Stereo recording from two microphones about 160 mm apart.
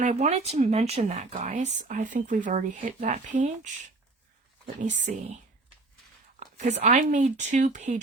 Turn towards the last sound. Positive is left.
turn(degrees=-45)  # may be behind; listen again after turning